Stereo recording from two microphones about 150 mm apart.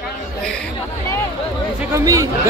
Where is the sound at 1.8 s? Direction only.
20° right (ahead or behind).